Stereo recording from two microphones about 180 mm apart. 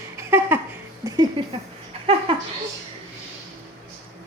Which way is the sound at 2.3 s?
30° right (ahead or behind).